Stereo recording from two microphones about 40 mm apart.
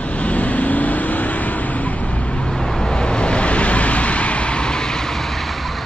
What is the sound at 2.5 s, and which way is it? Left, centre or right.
Vehicle, centre.